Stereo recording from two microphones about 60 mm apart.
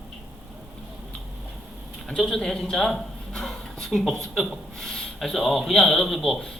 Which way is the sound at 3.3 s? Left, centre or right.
Centre.